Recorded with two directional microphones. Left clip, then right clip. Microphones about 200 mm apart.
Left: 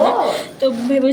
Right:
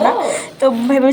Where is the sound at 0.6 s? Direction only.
20° right (ahead or behind).